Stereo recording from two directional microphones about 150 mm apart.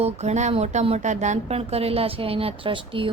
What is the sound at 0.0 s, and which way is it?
Speech, 50° right (ahead or behind).